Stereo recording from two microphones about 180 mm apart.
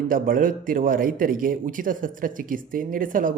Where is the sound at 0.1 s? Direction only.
50° right (ahead or behind).